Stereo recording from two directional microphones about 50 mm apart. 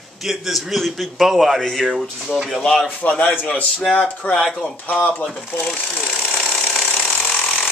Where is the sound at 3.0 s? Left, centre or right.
Left.